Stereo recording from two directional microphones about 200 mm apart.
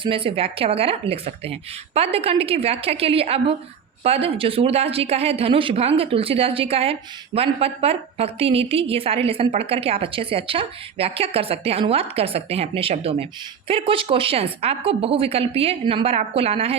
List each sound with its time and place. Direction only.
0.0 s a woman's voice: 25° right (ahead or behind)